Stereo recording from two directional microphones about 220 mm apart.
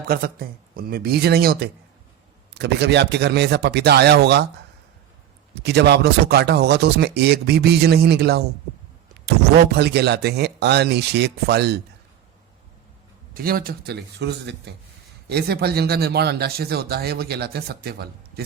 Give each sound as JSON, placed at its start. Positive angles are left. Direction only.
{"t": 0.1, "sound": "speech", "side_deg": -45}
{"t": 5.6, "sound": "speech", "side_deg": -50}
{"t": 13.3, "sound": "speech", "side_deg": -40}